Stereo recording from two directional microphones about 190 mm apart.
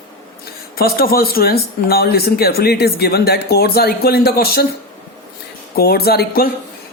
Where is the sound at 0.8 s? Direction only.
50° left (ahead or behind).